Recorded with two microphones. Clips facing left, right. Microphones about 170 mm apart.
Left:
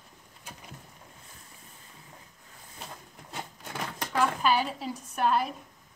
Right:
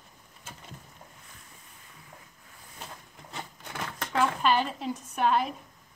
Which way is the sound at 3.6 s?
15° left (ahead or behind).